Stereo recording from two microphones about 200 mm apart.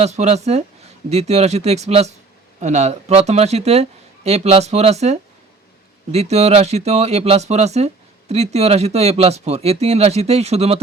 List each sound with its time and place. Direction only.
0.0 s speech: 30° right (ahead or behind)